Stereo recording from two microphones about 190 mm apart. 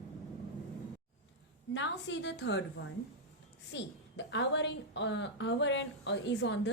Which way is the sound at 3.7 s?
70° left (ahead or behind).